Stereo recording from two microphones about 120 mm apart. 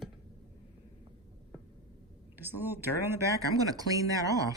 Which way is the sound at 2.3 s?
15° right (ahead or behind).